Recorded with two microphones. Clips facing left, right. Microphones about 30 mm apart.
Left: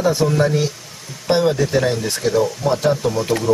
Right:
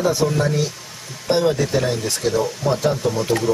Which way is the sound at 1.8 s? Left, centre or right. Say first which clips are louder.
Left 2 dB; left.